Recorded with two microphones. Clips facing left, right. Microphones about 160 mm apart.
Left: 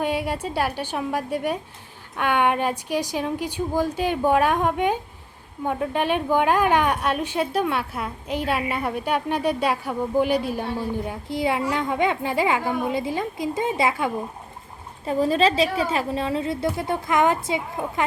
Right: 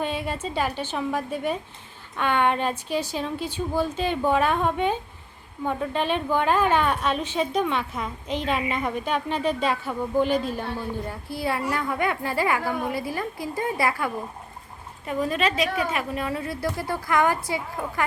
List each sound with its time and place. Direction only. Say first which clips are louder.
0.0 s a woman's voice: left 3 dB; 10° left (ahead or behind)
15.0 s a woman's voice: left 5 dB; 30° left (ahead or behind)